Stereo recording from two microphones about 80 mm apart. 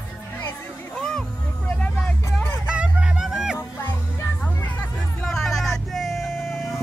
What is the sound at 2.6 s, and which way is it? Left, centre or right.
Music, centre.